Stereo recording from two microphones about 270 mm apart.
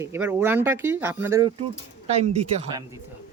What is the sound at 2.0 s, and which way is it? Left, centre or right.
Speech, right.